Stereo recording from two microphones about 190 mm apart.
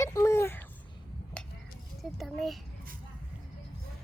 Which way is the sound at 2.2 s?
Centre (ahead or behind).